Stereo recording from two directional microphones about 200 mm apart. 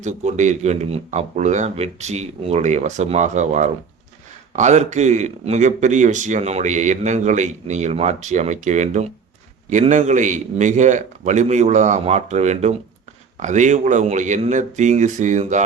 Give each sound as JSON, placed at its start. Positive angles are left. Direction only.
{"t": 0.0, "sound": "speech", "side_deg": -35}